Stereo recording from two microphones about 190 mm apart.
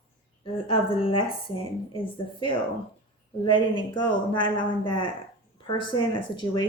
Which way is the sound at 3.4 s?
25° left (ahead or behind).